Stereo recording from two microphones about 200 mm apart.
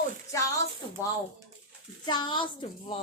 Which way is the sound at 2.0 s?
20° left (ahead or behind).